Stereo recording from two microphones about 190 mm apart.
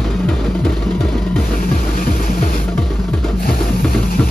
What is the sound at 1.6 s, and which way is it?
Music, 50° left (ahead or behind).